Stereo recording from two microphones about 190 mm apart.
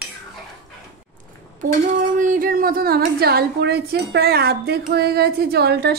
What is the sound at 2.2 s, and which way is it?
A woman's voice, 45° right (ahead or behind).